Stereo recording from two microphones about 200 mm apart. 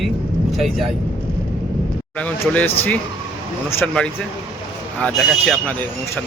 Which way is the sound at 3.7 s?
5° left (ahead or behind).